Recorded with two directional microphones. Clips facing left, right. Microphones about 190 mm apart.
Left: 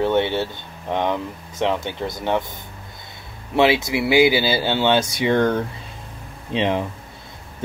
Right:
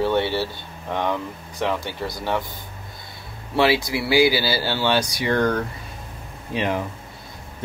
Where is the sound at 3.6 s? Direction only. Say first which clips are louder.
Left 2 dB; 20° left (ahead or behind).